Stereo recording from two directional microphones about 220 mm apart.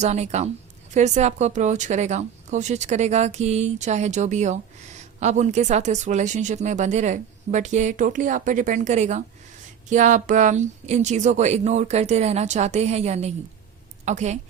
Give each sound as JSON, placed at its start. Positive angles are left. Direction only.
{"t": 0.0, "sound": "a woman's voice", "side_deg": -30}